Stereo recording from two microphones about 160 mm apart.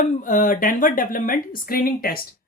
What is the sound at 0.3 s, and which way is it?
Speech, 55° left (ahead or behind).